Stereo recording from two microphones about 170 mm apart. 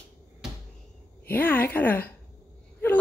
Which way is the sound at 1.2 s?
10° left (ahead or behind).